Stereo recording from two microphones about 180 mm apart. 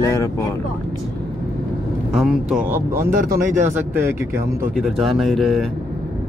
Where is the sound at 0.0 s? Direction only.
15° left (ahead or behind).